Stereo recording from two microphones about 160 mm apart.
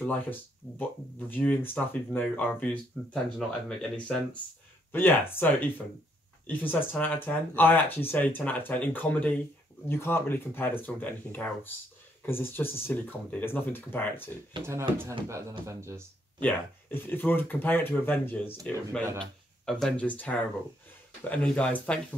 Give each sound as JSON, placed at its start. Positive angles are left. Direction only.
{"t": 0.0, "sound": "speech", "side_deg": 10}
{"t": 15.0, "sound": "speech", "side_deg": -20}
{"t": 16.3, "sound": "speech", "side_deg": 10}